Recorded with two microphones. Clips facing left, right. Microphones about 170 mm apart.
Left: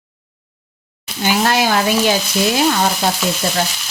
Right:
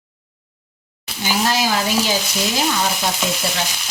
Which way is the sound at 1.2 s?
60° left (ahead or behind).